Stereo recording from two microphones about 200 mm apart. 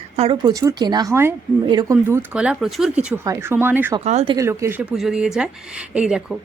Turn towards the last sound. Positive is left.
turn(degrees=-5)  # may be behind; listen again after turning